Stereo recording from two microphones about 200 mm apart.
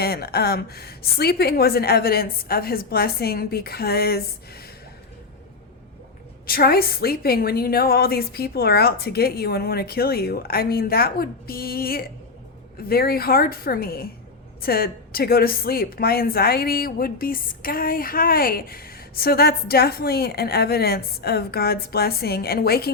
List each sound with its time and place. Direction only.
0.0 s a woman's voice: 50° left (ahead or behind)
6.4 s a woman's voice: 50° left (ahead or behind)